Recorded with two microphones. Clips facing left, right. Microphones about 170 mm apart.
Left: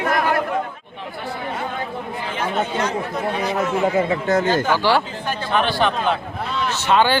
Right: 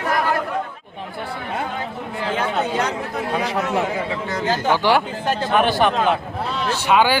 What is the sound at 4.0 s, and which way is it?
Speech, 45° left (ahead or behind).